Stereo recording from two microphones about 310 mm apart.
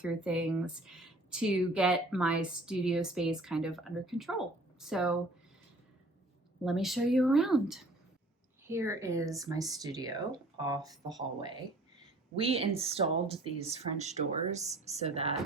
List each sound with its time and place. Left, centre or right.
0.0 s speech: centre
6.7 s speech: centre